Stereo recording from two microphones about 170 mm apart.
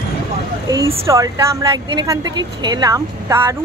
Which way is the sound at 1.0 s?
20° right (ahead or behind).